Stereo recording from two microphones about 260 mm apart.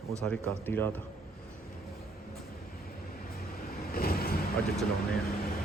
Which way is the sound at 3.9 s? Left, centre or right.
Left.